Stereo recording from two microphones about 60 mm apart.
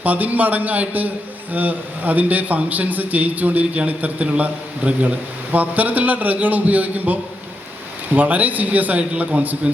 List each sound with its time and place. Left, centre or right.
0.0 s a man's voice: right